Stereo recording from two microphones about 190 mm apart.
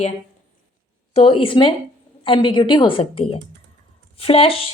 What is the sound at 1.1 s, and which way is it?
A woman's voice, 30° left (ahead or behind).